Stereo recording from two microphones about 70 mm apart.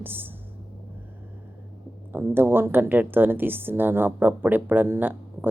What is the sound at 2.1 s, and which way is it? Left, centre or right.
Speech, right.